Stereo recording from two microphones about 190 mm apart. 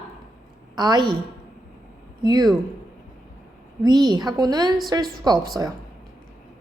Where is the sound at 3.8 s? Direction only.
20° right (ahead or behind).